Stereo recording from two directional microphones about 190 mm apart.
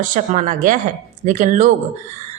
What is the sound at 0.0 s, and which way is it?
A woman's voice, 40° right (ahead or behind).